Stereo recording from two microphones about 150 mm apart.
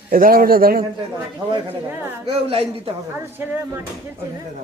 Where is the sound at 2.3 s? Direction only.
40° right (ahead or behind).